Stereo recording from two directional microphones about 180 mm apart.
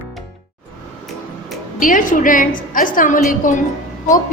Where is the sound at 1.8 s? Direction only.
45° left (ahead or behind).